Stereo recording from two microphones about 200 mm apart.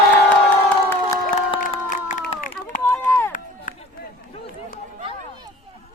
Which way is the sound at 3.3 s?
45° left (ahead or behind).